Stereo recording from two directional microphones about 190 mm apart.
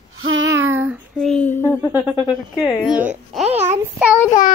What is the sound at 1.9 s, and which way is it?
Speech, 10° right (ahead or behind).